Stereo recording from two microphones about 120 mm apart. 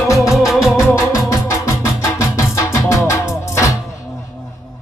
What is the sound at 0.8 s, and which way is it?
Music, 25° left (ahead or behind).